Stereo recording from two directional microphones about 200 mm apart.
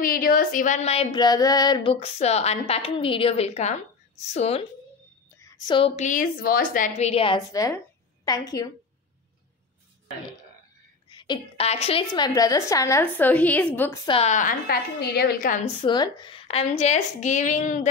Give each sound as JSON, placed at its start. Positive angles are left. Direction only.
{"t": 0.0, "sound": "a woman's voice", "side_deg": 45}
{"t": 1.1, "sound": "a woman's voice", "side_deg": 20}
{"t": 5.4, "sound": "a sound", "side_deg": 15}
{"t": 5.8, "sound": "a woman's voice", "side_deg": 30}
{"t": 11.1, "sound": "a woman's voice", "side_deg": 25}
{"t": 14.0, "sound": "a woman's voice", "side_deg": 30}
{"t": 15.8, "sound": "a woman's voice", "side_deg": 20}